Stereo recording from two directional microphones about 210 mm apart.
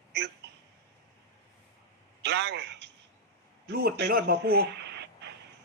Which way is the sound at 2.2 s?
55° right (ahead or behind).